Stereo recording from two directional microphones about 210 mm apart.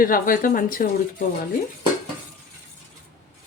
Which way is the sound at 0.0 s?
40° left (ahead or behind).